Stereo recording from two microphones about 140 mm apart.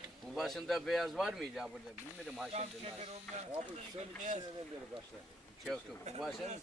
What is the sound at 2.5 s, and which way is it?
Speech, 50° right (ahead or behind).